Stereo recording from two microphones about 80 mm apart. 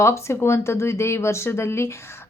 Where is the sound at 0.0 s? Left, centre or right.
Left.